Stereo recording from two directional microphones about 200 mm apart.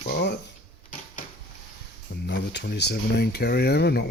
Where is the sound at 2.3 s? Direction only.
60° left (ahead or behind).